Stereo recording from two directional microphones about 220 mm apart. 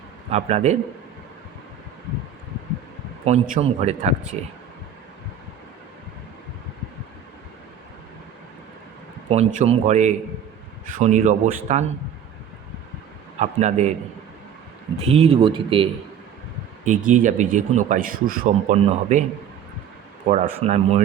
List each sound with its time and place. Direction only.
0.3 s speech: 30° right (ahead or behind)
3.2 s speech: 30° right (ahead or behind)
9.3 s a man's voice: 30° right (ahead or behind)
13.4 s a man's voice: 30° right (ahead or behind)
14.9 s speech: 30° right (ahead or behind)
16.8 s a man's voice: 35° right (ahead or behind)
20.2 s a man's voice: 35° right (ahead or behind)